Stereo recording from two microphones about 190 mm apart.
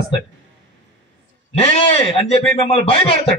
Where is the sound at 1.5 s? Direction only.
30° left (ahead or behind).